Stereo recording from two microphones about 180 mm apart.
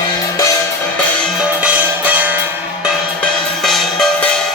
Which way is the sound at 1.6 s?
10° right (ahead or behind).